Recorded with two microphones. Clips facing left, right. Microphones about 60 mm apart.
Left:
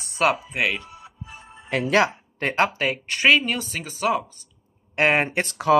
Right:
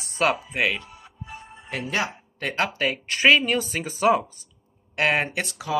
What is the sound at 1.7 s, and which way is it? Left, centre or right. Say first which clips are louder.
Speech: left 7 dB; left.